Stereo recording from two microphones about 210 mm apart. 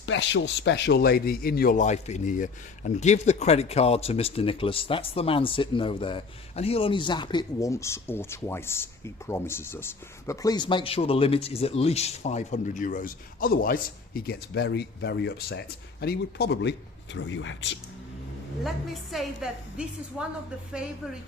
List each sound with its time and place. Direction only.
0.0 s speech: 65° left (ahead or behind)
19.1 s a woman's voice: centre (ahead or behind)